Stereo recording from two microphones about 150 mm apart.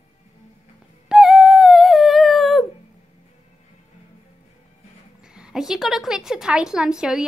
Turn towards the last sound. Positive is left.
turn(degrees=-5)  # may be behind; listen again after turning